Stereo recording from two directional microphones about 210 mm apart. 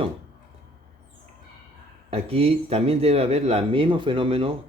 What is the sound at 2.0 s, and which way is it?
Speech, 30° right (ahead or behind).